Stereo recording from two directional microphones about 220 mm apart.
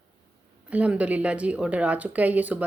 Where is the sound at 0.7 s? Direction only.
5° right (ahead or behind).